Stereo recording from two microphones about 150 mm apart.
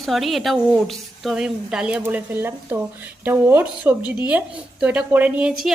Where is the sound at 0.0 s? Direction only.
Centre (ahead or behind).